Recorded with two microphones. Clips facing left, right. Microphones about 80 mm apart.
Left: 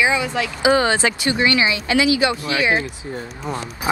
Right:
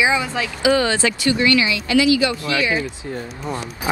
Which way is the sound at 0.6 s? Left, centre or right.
Left.